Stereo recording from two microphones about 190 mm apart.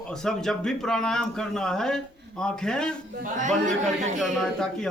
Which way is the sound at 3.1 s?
45° right (ahead or behind).